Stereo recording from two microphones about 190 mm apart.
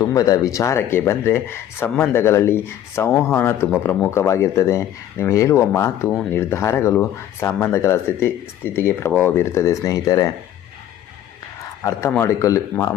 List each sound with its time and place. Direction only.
0.0 s speech: 20° left (ahead or behind)
11.8 s speech: 15° left (ahead or behind)